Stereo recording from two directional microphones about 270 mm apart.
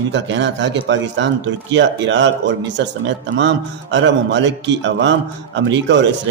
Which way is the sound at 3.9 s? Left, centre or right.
Right.